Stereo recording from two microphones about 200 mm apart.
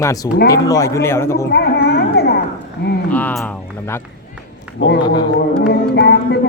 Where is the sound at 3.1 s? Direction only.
10° left (ahead or behind).